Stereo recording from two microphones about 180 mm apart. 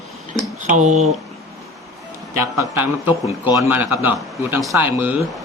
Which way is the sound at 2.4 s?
20° right (ahead or behind).